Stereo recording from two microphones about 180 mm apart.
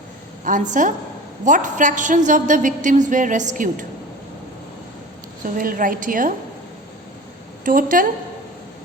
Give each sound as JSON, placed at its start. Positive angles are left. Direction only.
{"t": 0.4, "sound": "a woman's voice", "side_deg": -45}
{"t": 5.5, "sound": "a woman's voice", "side_deg": -50}
{"t": 7.6, "sound": "a woman's voice", "side_deg": -50}